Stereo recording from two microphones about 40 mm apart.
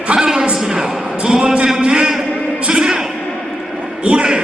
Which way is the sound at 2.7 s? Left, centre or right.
Centre.